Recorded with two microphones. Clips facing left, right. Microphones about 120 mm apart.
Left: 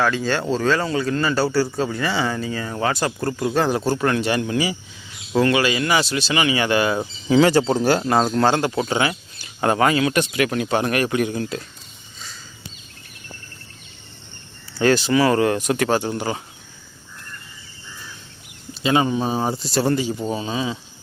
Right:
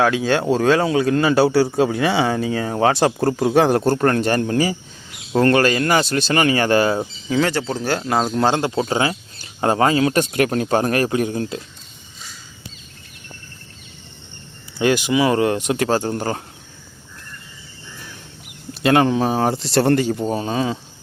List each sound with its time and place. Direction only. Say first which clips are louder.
0.5 s speech: right 4 dB; 60° right (ahead or behind); by 3.3 s 90° right
3.4 s speech: right 4 dB; 65° right (ahead or behind); by 7.0 s 40° right (ahead or behind)
7.3 s speech: left 5 dB; 15° left (ahead or behind)
8.0 s speech: left 1 dB; centre (ahead or behind)
8.3 s speech: even; 20° right (ahead or behind)
14.8 s speech: even; 15° right (ahead or behind)
16.0 s speech: right 2 dB; 45° right (ahead or behind)
18.7 s speech: right 4 dB; 60° right (ahead or behind)